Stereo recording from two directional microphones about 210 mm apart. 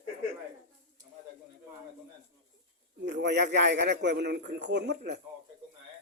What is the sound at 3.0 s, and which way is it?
A man's voice, 55° right (ahead or behind).